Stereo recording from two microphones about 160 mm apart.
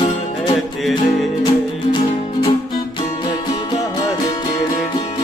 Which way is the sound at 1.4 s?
30° left (ahead or behind).